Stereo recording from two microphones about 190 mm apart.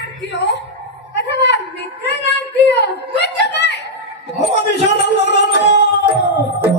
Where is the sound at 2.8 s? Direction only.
65° left (ahead or behind).